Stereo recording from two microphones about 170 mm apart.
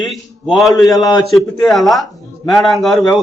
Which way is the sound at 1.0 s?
20° left (ahead or behind).